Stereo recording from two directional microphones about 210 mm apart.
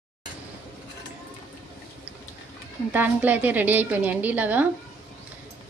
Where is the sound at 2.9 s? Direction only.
10° right (ahead or behind).